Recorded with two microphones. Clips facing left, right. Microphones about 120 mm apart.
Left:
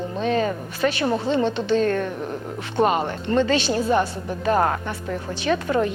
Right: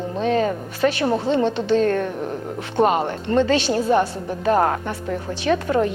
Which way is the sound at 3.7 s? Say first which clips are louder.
Right 2 dB; 30° right (ahead or behind).